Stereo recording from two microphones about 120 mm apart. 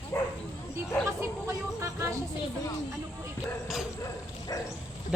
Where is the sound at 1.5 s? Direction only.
25° right (ahead or behind).